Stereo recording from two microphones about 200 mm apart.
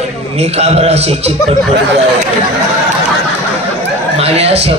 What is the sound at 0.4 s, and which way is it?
Speech, 30° right (ahead or behind).